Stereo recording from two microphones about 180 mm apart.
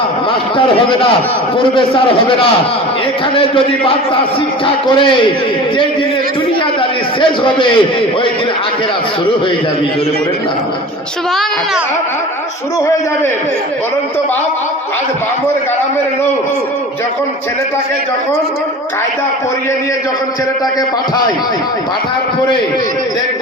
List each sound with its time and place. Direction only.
0.5 s a man's voice: 30° left (ahead or behind)
7.2 s a man's voice: 30° left (ahead or behind)